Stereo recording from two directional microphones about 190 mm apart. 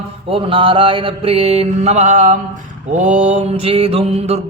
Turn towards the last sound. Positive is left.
turn(degrees=-35)  # may be behind; listen again after turning